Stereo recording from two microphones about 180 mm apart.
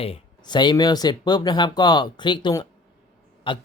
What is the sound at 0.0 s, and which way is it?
Speech, 30° left (ahead or behind).